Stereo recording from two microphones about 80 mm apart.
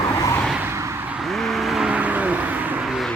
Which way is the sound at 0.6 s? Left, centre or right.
Right.